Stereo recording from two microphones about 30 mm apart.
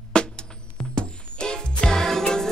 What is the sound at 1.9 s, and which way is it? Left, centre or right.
Music, centre.